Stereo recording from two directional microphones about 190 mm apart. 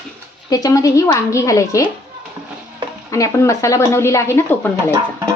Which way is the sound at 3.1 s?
15° left (ahead or behind).